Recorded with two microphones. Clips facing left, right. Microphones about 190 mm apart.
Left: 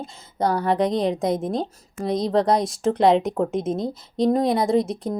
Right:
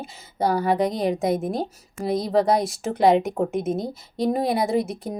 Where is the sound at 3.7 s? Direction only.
25° left (ahead or behind).